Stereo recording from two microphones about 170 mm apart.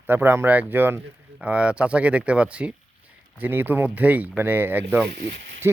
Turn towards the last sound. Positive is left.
turn(degrees=-90)